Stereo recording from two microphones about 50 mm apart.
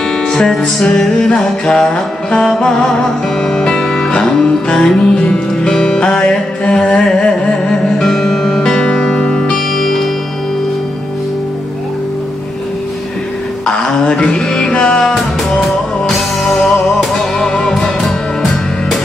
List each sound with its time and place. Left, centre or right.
0.3 s music: centre
13.7 s a sound: centre
14.4 s music: centre
14.7 s music: centre
15.1 s music: centre